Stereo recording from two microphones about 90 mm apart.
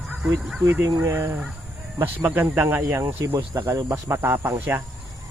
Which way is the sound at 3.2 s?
40° right (ahead or behind).